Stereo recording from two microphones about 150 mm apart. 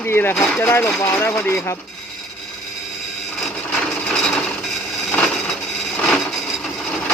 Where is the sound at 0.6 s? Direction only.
15° left (ahead or behind).